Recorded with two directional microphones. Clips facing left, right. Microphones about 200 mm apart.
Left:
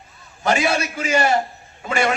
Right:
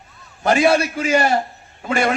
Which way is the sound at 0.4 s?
55° right (ahead or behind).